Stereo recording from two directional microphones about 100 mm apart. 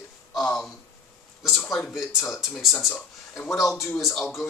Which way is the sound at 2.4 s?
5° right (ahead or behind).